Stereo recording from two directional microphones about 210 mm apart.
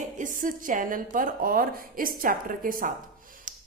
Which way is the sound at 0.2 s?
40° right (ahead or behind).